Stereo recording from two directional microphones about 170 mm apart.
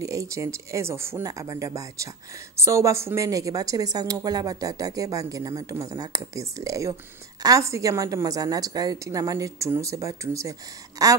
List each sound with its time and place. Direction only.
0.0 s a woman's voice: 20° right (ahead or behind)